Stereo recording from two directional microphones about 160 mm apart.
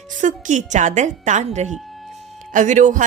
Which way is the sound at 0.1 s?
50° right (ahead or behind).